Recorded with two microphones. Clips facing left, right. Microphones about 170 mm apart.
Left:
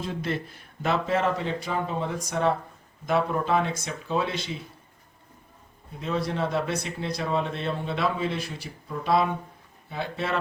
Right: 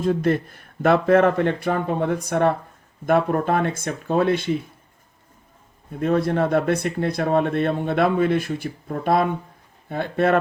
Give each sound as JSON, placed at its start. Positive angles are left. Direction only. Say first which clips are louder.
{"t": 0.0, "sound": "speech", "louder": "right 10 dB", "side_deg": -50}
{"t": 6.0, "sound": "speech", "louder": "right 8 dB", "side_deg": -55}